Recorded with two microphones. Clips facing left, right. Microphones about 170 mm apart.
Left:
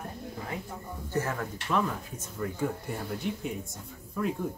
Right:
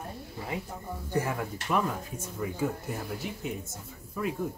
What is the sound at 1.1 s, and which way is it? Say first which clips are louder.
Speech: right 1 dB; 10° right (ahead or behind).